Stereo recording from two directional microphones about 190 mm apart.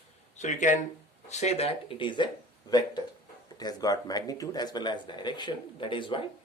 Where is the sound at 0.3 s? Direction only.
40° left (ahead or behind).